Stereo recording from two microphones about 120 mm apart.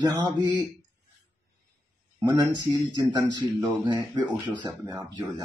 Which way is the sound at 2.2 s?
40° right (ahead or behind).